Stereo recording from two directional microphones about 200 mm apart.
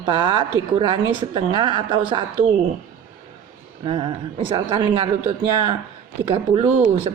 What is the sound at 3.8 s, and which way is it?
Speech, 25° right (ahead or behind).